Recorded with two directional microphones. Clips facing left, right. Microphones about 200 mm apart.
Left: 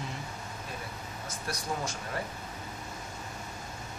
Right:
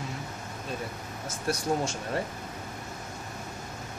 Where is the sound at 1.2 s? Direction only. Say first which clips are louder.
Right 8 dB; 25° right (ahead or behind).